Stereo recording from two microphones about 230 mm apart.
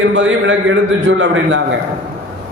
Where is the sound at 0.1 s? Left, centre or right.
Right.